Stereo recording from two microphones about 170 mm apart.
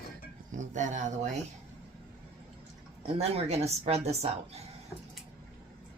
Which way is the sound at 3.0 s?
35° right (ahead or behind).